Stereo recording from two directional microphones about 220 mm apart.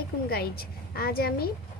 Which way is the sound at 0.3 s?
45° left (ahead or behind).